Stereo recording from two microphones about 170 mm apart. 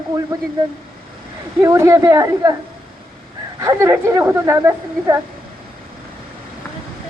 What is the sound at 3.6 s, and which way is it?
A woman's voice, 15° right (ahead or behind).